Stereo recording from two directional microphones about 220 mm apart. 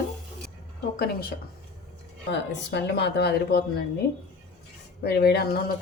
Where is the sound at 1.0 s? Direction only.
45° left (ahead or behind).